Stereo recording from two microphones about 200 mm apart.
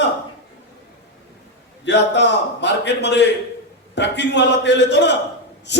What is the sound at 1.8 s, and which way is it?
A man's voice, 60° left (ahead or behind).